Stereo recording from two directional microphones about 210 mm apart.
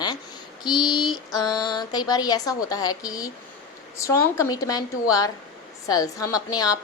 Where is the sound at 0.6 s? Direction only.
20° left (ahead or behind).